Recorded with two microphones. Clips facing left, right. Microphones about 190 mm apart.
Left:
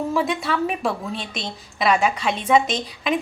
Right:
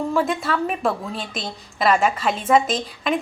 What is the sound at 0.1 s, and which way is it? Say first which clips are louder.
A woman's voice: right 1 dB; centre (ahead or behind).